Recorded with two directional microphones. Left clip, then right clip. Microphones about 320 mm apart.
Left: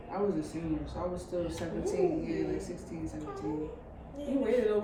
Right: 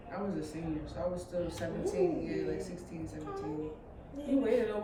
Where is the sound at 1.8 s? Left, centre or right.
Centre.